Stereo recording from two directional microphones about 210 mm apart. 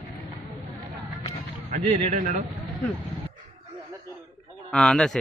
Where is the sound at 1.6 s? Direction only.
40° right (ahead or behind).